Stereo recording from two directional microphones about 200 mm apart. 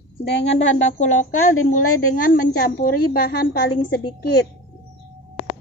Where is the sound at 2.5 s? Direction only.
45° left (ahead or behind).